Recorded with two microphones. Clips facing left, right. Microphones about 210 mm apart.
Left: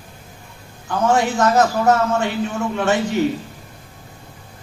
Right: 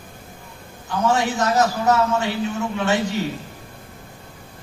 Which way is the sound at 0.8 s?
50° left (ahead or behind).